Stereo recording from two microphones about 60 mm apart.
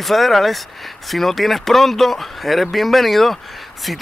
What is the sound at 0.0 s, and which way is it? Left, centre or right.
Speech, centre.